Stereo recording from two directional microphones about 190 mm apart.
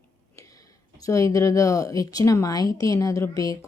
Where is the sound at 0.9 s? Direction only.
15° left (ahead or behind).